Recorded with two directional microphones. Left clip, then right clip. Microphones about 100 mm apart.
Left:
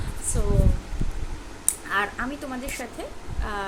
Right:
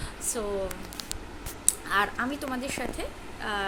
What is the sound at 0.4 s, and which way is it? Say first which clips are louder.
Speech: left 1 dB; 30° right (ahead or behind).